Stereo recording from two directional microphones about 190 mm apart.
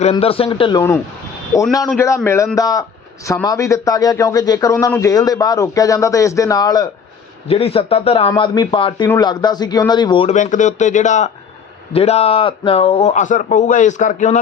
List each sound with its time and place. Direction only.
0.0 s speech: 30° left (ahead or behind)
1.9 s a man's voice: 15° left (ahead or behind)
7.4 s a man's voice: 30° left (ahead or behind)
10.3 s a man's voice: 40° left (ahead or behind)